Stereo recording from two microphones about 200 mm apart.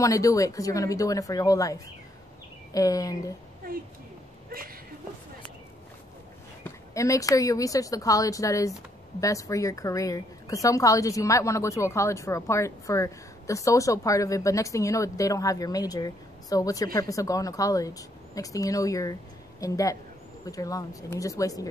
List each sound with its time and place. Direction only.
0.0 s a woman's voice: 15° left (ahead or behind)
6.6 s a woman's voice: 15° left (ahead or behind)